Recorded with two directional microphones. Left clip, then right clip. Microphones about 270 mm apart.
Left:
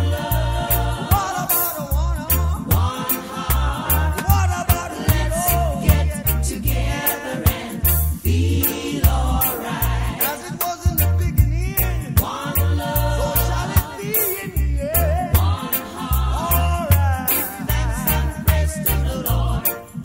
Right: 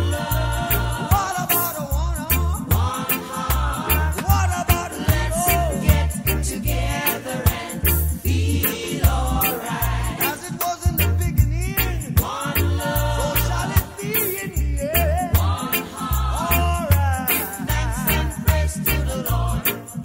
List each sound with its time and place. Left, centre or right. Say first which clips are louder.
1.0 s music: even; centre
4.2 s music: even; centre
13.6 s music: left 1 dB; centre
16.3 s music: even; centre